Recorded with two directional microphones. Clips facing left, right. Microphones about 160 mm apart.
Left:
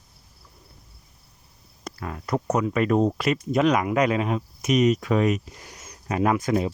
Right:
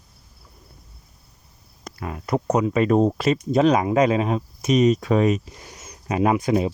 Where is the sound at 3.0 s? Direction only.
35° right (ahead or behind).